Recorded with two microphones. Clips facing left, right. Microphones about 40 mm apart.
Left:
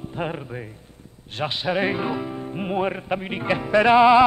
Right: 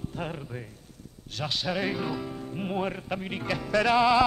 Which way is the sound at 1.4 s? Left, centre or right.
Left.